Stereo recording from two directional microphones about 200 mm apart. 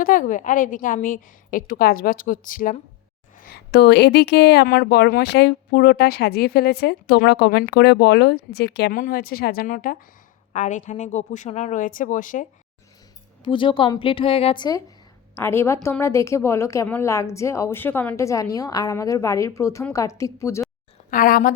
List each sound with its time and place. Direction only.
0.0 s a woman's voice: 40° left (ahead or behind)
13.4 s a woman's voice: 25° left (ahead or behind)
21.1 s a woman's voice: 45° left (ahead or behind)